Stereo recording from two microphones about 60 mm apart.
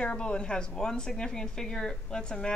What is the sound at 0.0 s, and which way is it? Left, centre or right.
A woman's voice, centre.